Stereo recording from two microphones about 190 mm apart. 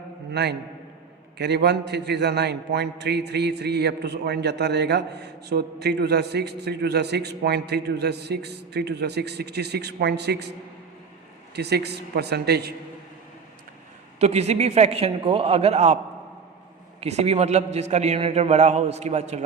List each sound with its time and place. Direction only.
0.3 s a man's voice: 60° right (ahead or behind)
11.5 s a man's voice: 60° right (ahead or behind)
14.2 s a man's voice: 35° right (ahead or behind)
17.0 s a man's voice: 35° right (ahead or behind)